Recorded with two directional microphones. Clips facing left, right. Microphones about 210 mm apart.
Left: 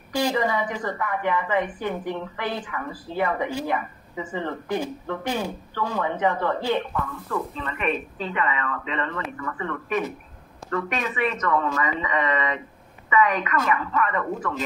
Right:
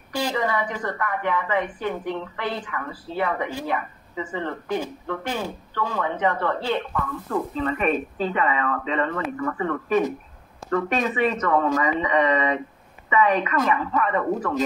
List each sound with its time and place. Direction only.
0.1 s a woman's voice: 15° left (ahead or behind)
7.2 s a woman's voice: 35° right (ahead or behind)